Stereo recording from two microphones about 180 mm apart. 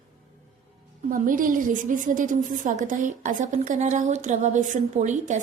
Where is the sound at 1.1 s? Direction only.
50° right (ahead or behind).